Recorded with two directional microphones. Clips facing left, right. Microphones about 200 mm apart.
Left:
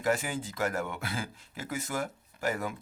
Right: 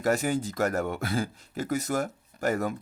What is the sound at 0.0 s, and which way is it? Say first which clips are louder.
Speech: right 5 dB; 45° right (ahead or behind).